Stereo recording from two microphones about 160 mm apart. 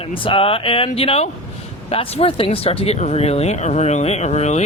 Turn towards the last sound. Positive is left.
turn(degrees=45)  # may be behind; listen again after turning